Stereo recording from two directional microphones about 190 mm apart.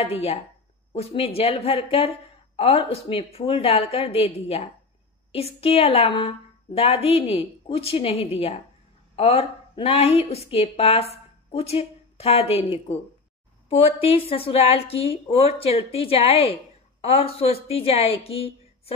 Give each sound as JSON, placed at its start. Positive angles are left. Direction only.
{"t": 0.0, "sound": "a woman's voice", "side_deg": 30}